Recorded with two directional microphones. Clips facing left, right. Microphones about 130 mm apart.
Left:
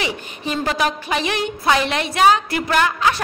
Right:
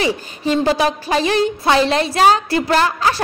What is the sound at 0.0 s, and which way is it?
A woman's voice, 35° right (ahead or behind).